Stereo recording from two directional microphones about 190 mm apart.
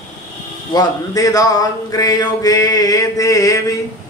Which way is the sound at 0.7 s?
20° left (ahead or behind).